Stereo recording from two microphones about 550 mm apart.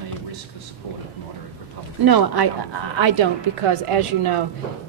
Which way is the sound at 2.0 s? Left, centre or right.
Right.